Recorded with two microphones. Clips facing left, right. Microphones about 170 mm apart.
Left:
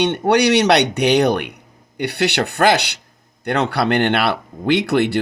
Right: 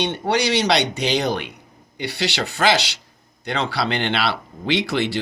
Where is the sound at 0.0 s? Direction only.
65° left (ahead or behind).